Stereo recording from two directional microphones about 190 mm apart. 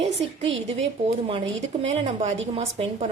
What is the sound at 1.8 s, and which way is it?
A woman's voice, 35° right (ahead or behind).